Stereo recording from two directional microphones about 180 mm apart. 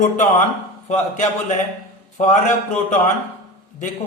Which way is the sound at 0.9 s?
40° left (ahead or behind).